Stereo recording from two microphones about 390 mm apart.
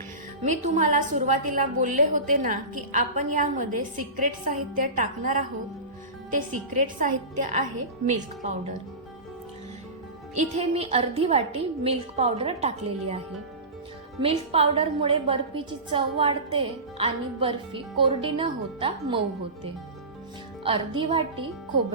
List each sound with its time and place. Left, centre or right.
0.4 s a woman's voice: centre
6.8 s a woman's voice: centre
10.3 s a woman's voice: centre
20.7 s a woman's voice: centre